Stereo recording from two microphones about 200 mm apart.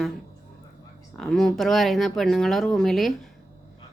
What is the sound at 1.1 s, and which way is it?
Speech, 5° left (ahead or behind).